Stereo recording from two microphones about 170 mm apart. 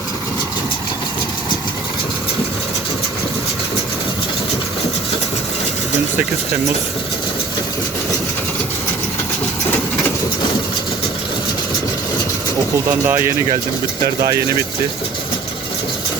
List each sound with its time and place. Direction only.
13.1 s speech: 15° right (ahead or behind)